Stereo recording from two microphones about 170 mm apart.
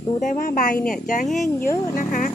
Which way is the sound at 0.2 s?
50° left (ahead or behind).